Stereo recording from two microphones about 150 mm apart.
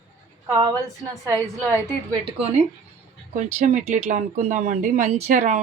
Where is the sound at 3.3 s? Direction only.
50° right (ahead or behind).